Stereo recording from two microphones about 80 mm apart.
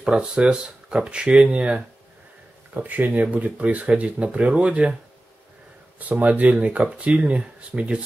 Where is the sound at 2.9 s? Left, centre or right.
Right.